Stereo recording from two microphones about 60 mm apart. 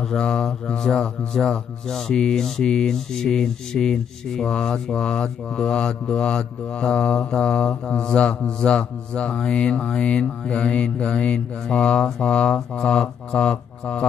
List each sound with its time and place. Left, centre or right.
0.0 s mantra: centre